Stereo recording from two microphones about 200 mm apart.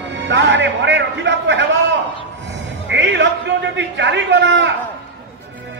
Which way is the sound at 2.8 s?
65° right (ahead or behind).